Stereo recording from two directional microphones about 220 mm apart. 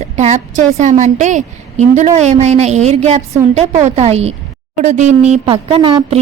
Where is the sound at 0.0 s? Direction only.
30° right (ahead or behind).